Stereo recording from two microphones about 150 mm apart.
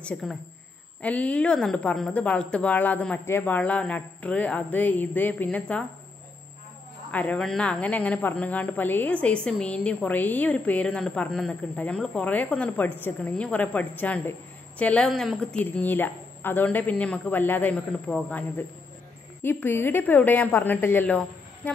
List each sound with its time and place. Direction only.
0.0 s a woman's voice: 5° left (ahead or behind)
7.1 s a woman's voice: 10° left (ahead or behind)
19.4 s a woman's voice: 15° left (ahead or behind)